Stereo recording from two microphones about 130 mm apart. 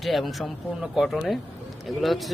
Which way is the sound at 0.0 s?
Centre (ahead or behind).